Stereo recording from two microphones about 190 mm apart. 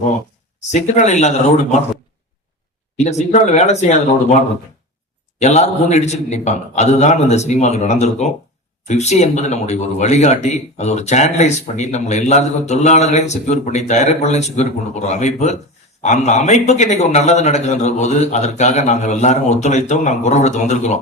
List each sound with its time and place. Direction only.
0.7 s speech: 40° left (ahead or behind)
3.0 s speech: 35° left (ahead or behind)
5.4 s speech: 35° left (ahead or behind)